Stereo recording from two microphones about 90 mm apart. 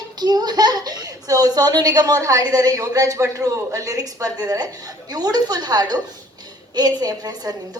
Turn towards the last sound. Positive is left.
turn(degrees=-45)  # may be behind; listen again after turning